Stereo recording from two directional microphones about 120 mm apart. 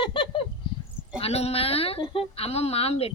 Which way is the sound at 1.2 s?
60° left (ahead or behind).